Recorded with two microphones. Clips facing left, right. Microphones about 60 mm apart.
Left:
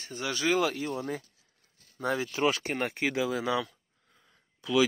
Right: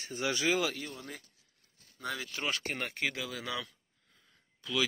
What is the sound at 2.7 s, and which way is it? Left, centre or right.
Speech, centre.